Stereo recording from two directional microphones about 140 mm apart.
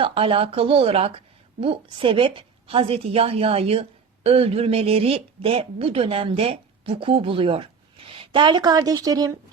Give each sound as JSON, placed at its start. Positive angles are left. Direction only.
{"t": 0.0, "sound": "a woman's voice", "side_deg": -40}